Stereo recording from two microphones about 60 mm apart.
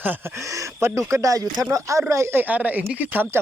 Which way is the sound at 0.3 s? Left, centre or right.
Right.